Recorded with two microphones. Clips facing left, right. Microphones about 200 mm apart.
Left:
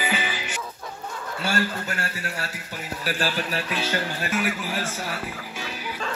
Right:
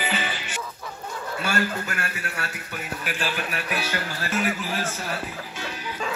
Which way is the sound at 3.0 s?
35° left (ahead or behind).